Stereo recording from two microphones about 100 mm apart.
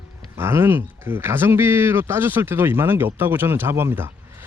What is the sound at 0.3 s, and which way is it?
A man's voice, 25° right (ahead or behind).